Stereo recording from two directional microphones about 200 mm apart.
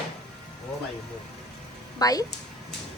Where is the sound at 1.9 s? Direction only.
20° left (ahead or behind).